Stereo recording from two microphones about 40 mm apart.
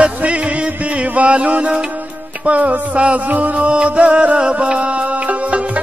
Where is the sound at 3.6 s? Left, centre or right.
Right.